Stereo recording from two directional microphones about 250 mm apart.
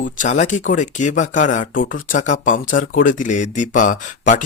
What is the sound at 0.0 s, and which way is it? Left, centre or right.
Speech, left.